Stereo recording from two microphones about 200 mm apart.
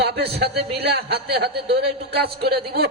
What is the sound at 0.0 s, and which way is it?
A man's voice, 55° right (ahead or behind).